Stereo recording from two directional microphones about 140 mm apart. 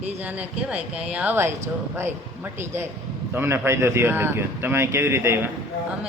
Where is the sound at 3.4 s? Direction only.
15° right (ahead or behind).